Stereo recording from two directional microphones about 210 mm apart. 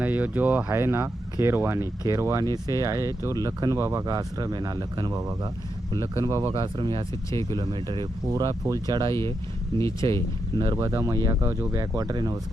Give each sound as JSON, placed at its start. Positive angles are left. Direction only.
{"t": 0.0, "sound": "speech", "side_deg": -10}
{"t": 9.7, "sound": "speech", "side_deg": 15}
{"t": 10.6, "sound": "speech", "side_deg": -20}